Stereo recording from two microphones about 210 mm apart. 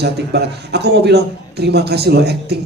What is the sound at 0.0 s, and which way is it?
A child's voice, 50° right (ahead or behind).